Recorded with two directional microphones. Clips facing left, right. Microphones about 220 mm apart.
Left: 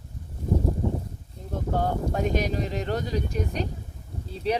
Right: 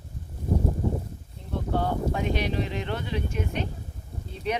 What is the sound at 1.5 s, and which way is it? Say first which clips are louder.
Speech: even; 45° left (ahead or behind).